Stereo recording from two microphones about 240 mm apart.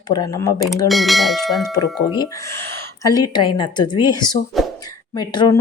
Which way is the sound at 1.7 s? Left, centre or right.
Centre.